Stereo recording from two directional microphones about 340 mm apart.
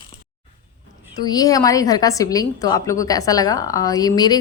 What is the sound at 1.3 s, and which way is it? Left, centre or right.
A woman's voice, centre.